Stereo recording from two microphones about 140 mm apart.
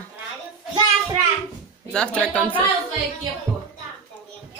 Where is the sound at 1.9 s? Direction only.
5° left (ahead or behind).